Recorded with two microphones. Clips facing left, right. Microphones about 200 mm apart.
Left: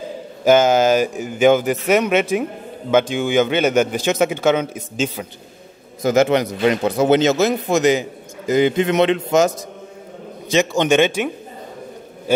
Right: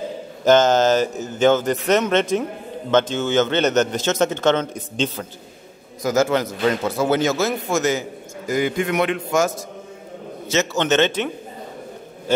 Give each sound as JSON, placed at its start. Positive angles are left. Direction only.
{"t": 0.4, "sound": "a man's voice", "side_deg": 10}
{"t": 6.0, "sound": "a man's voice", "side_deg": 20}
{"t": 10.5, "sound": "a man's voice", "side_deg": 15}